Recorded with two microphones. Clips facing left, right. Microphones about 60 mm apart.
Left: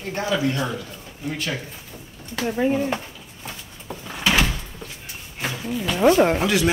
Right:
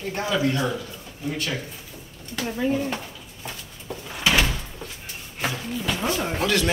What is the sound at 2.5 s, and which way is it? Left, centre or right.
Speech, left.